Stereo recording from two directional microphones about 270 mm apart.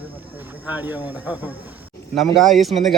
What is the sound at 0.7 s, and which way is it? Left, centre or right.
A man's voice, centre.